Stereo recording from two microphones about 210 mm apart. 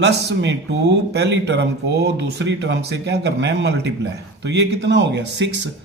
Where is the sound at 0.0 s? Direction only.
55° right (ahead or behind).